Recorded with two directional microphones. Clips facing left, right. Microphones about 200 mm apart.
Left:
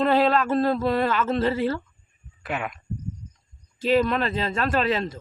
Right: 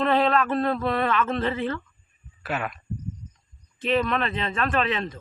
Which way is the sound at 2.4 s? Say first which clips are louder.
Even; 15° left (ahead or behind).